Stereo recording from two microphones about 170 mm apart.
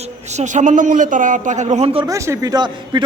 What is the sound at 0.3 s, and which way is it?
A man's voice, 45° right (ahead or behind).